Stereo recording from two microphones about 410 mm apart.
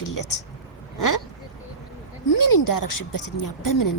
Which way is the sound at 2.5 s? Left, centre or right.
Left.